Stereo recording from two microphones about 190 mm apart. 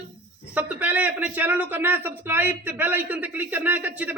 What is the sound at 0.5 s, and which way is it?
A man's voice, 5° right (ahead or behind).